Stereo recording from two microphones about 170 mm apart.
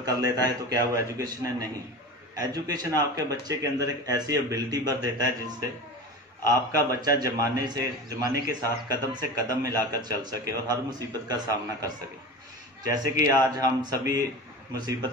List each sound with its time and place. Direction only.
0.0 s a man's voice: 20° right (ahead or behind)
6.4 s a man's voice: 20° right (ahead or behind)